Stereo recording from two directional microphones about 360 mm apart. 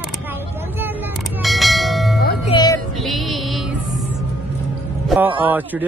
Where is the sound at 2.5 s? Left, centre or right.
Centre.